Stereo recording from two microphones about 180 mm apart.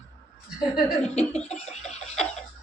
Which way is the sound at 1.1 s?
35° left (ahead or behind).